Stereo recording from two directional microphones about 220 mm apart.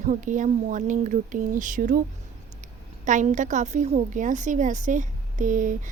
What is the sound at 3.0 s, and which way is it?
A woman's voice, 35° right (ahead or behind).